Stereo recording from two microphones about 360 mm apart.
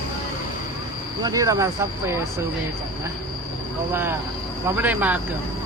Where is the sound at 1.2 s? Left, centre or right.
Centre.